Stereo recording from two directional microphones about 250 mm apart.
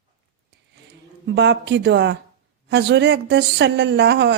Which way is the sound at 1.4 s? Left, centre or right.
Right.